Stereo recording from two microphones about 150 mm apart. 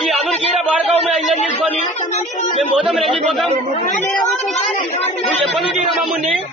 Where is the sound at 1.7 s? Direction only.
45° left (ahead or behind).